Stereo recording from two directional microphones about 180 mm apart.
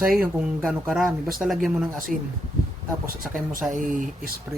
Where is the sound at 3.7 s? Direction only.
45° right (ahead or behind).